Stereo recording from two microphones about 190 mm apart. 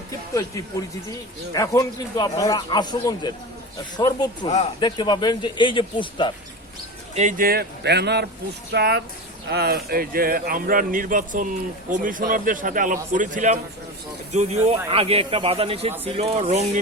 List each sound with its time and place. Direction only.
0.3 s speech: 15° left (ahead or behind)
7.2 s speech: 45° right (ahead or behind)